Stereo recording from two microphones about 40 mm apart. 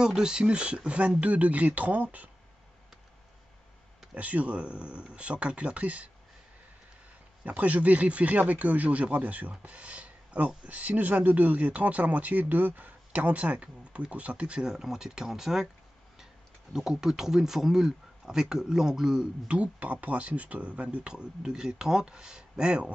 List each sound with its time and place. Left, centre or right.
0.0 s speech: centre; by 2.3 s right
4.1 s speech: right
7.4 s speech: right
14.7 s speech: centre
16.7 s speech: centre
19.4 s speech: right